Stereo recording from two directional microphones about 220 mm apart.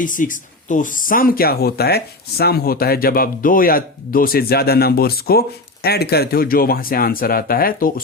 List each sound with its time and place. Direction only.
0.0 s speech: 35° left (ahead or behind)